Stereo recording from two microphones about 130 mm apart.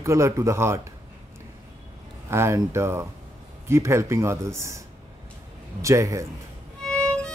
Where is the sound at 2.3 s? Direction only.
20° right (ahead or behind).